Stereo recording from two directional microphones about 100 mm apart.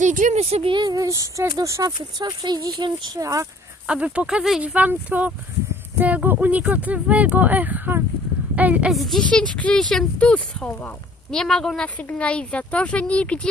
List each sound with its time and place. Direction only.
0.3 s speech: 90° right
0.7 s speech: 45° right (ahead or behind)
1.0 s speech: 30° right (ahead or behind)
3.8 s speech: 10° right (ahead or behind)
8.9 s speech: centre (ahead or behind)